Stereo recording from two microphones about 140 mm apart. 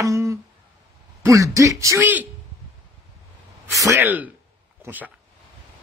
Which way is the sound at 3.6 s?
20° right (ahead or behind).